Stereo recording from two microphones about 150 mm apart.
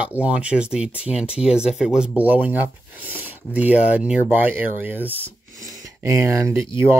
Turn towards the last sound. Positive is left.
turn(degrees=-20)  # may be behind; listen again after turning